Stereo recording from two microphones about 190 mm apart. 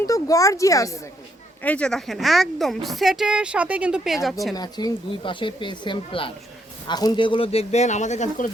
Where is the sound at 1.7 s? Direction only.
5° left (ahead or behind).